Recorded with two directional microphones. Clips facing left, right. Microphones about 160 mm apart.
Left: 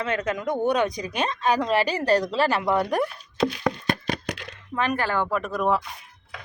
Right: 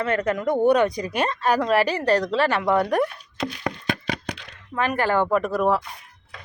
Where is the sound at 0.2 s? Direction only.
15° left (ahead or behind).